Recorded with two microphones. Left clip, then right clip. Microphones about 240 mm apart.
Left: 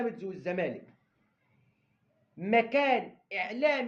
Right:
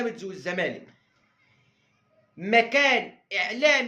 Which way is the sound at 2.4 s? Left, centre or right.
Centre.